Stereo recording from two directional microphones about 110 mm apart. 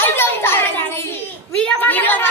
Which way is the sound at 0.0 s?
20° left (ahead or behind).